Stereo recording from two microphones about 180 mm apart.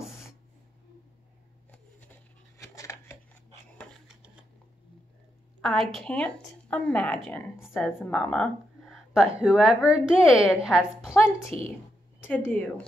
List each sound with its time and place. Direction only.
2.6 s scissors: 15° left (ahead or behind)
5.6 s speech: centre (ahead or behind)
11.5 s a woman's voice: 30° right (ahead or behind)
12.4 s a woman's voice: 10° left (ahead or behind)